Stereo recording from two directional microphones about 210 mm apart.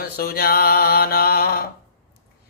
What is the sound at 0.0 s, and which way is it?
Mantra, 45° left (ahead or behind).